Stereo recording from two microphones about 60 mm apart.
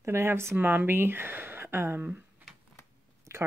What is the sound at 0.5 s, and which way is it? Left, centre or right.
Speech, right.